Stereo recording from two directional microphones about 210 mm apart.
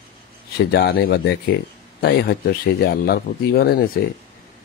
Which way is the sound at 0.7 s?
50° left (ahead or behind).